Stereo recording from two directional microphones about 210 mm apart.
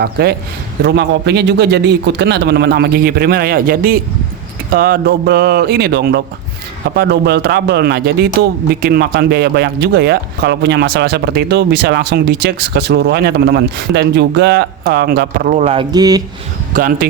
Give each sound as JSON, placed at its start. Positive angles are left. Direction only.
{"t": 0.0, "sound": "speech", "side_deg": -50}
{"t": 15.5, "sound": "speech", "side_deg": -25}
{"t": 16.7, "sound": "speech", "side_deg": -40}